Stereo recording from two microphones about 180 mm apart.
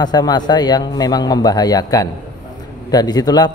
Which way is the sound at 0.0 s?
20° left (ahead or behind).